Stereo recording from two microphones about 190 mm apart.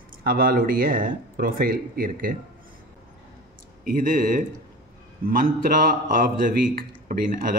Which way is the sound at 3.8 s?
50° right (ahead or behind).